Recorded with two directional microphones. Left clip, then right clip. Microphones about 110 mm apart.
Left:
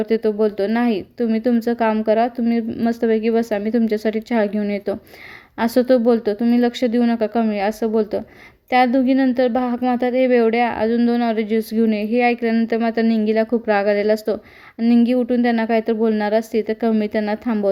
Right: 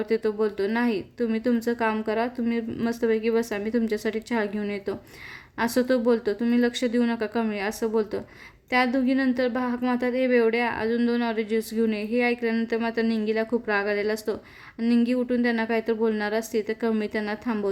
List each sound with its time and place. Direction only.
0.0 s speech: 35° left (ahead or behind)